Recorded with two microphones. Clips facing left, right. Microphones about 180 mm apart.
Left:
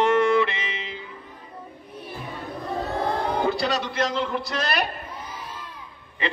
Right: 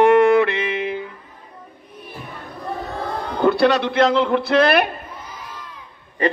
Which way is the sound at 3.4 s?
60° right (ahead or behind).